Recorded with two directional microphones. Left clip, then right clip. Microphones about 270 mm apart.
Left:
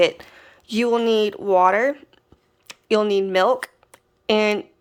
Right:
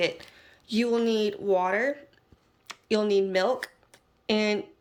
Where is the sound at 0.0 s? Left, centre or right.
Centre.